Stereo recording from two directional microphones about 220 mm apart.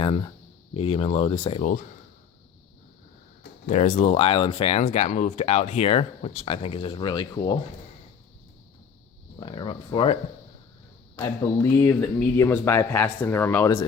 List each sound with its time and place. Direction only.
0.7 s speech: 25° left (ahead or behind)
3.7 s speech: 30° left (ahead or behind)
9.4 s speech: 20° left (ahead or behind)
11.2 s speech: 15° left (ahead or behind)